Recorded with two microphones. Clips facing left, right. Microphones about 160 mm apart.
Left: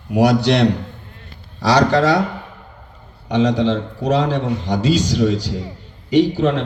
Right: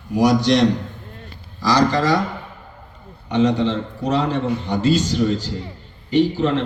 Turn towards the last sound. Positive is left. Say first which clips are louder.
# left 2 dB
turn(degrees=90)